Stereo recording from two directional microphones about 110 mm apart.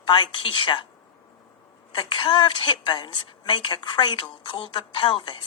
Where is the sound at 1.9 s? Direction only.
50° left (ahead or behind).